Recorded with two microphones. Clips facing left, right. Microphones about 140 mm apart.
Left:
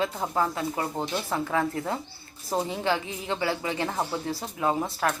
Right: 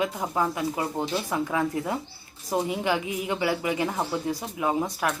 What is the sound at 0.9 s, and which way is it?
Speech, 5° right (ahead or behind).